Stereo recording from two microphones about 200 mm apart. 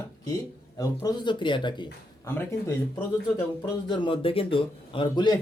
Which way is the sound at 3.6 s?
25° left (ahead or behind).